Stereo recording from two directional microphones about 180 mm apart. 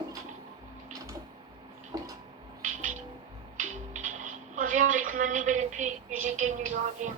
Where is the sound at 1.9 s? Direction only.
20° right (ahead or behind).